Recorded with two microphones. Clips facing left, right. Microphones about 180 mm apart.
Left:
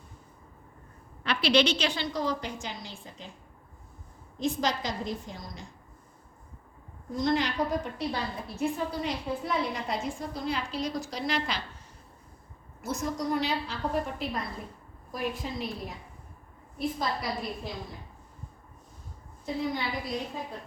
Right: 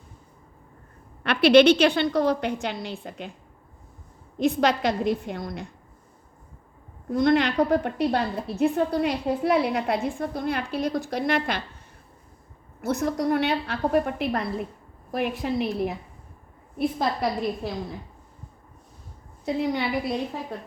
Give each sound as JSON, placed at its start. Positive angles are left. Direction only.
{"t": 1.2, "sound": "a woman's voice", "side_deg": -60}
{"t": 4.4, "sound": "a woman's voice", "side_deg": -65}
{"t": 7.1, "sound": "a woman's voice", "side_deg": -60}
{"t": 12.8, "sound": "a woman's voice", "side_deg": -65}
{"t": 19.5, "sound": "a woman's voice", "side_deg": -70}